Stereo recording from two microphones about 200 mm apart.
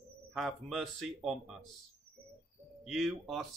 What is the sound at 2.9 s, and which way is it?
Speech, centre (ahead or behind).